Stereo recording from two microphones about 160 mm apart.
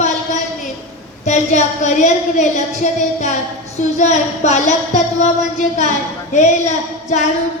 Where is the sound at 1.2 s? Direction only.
45° left (ahead or behind).